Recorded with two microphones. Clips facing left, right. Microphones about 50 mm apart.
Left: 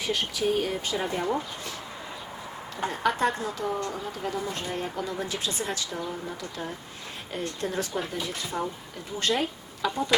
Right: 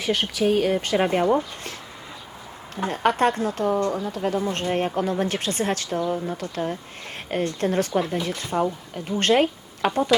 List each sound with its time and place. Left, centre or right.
0.0 s speech: right
2.8 s speech: right